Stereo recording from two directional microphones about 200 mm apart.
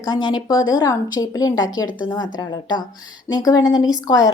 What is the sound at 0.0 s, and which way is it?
Speech, 20° left (ahead or behind).